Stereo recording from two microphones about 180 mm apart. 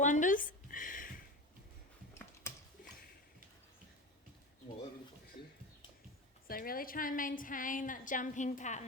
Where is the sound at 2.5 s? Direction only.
15° left (ahead or behind).